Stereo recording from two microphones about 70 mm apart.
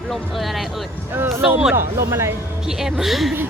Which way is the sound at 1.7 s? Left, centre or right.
Right.